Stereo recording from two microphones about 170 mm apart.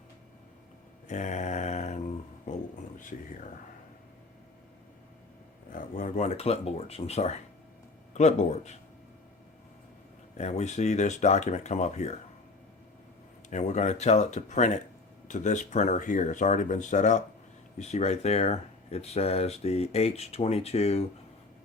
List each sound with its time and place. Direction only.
1.0 s a sound: 45° left (ahead or behind)
2.5 s speech: 50° left (ahead or behind)
5.7 s speech: 50° left (ahead or behind)
10.3 s speech: 40° left (ahead or behind)
13.5 s speech: 45° left (ahead or behind)